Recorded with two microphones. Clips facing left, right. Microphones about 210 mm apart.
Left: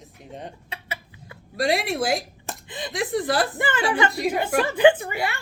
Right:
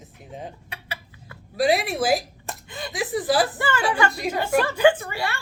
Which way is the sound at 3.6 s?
20° left (ahead or behind).